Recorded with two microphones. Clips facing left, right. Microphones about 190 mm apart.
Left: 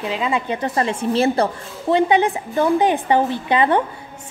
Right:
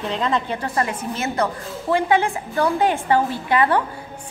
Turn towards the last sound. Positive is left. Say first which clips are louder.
# left 2 dB
turn(degrees=20)  # may be behind; listen again after turning